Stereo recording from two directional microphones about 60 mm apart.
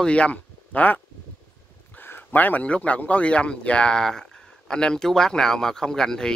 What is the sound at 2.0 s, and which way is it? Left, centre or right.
Speech, left.